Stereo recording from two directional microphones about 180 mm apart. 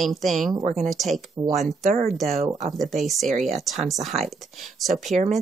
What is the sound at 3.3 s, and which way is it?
Speech, 40° right (ahead or behind).